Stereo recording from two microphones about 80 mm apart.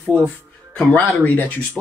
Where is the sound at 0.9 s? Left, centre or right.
Left.